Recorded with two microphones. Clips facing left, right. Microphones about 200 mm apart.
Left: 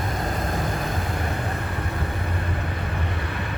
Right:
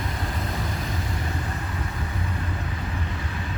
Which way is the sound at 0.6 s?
55° left (ahead or behind).